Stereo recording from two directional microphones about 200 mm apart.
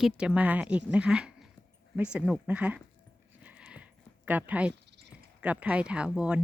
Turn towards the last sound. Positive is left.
turn(degrees=-5)  # may be behind; listen again after turning